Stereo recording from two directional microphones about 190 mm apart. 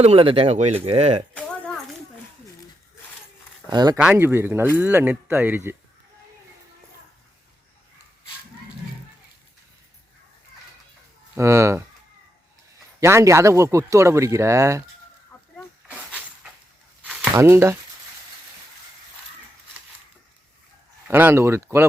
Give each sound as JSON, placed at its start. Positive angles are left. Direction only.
{"t": 0.0, "sound": "speech", "side_deg": -30}
{"t": 1.3, "sound": "a sound", "side_deg": 5}
{"t": 3.7, "sound": "speech", "side_deg": -20}
{"t": 3.9, "sound": "speech", "side_deg": -5}
{"t": 11.3, "sound": "speech", "side_deg": -15}
{"t": 13.0, "sound": "speech", "side_deg": -15}
{"t": 17.0, "sound": "a sound", "side_deg": -5}
{"t": 21.1, "sound": "speech", "side_deg": -10}